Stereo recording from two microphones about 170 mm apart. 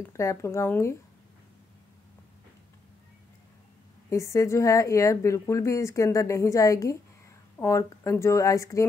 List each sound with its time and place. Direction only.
0.2 s speech: 15° left (ahead or behind)
4.1 s speech: 15° left (ahead or behind)